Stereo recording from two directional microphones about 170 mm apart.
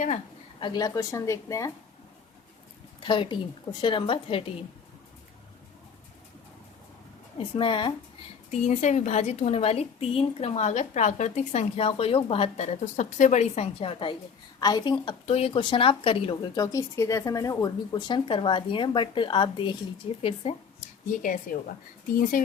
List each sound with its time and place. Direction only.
0.6 s speech: 25° left (ahead or behind)
3.0 s speech: 30° left (ahead or behind)
7.3 s speech: 30° left (ahead or behind)
8.4 s a woman's voice: 45° left (ahead or behind)
21.2 s a woman's voice: 50° left (ahead or behind)